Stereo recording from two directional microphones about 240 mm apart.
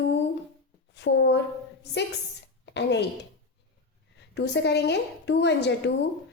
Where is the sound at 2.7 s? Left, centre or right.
Left.